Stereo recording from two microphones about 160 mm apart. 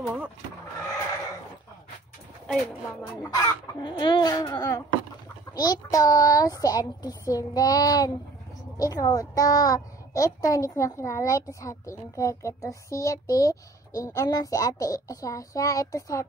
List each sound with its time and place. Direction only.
0.0 s vehicle: 10° right (ahead or behind)
3.3 s a woman's voice: 30° left (ahead or behind)